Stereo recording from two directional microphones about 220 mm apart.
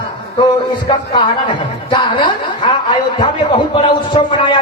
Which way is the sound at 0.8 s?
20° left (ahead or behind).